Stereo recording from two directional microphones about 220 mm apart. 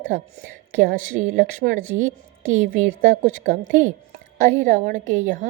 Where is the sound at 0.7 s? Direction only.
40° right (ahead or behind).